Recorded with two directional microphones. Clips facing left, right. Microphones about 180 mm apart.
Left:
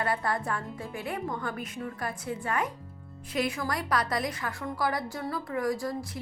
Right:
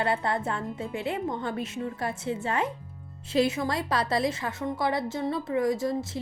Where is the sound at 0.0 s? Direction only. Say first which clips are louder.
Right 3 dB; 25° right (ahead or behind).